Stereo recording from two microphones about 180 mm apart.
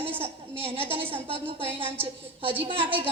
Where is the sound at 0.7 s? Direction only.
30° right (ahead or behind).